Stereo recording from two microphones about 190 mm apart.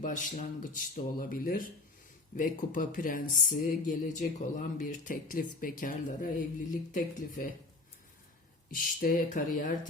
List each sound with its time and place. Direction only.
0.0 s speech: 45° left (ahead or behind)
8.7 s speech: 45° left (ahead or behind)